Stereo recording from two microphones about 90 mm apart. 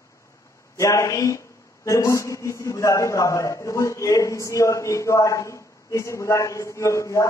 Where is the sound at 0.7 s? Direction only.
35° left (ahead or behind).